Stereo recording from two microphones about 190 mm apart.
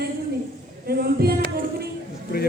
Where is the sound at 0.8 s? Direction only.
55° right (ahead or behind).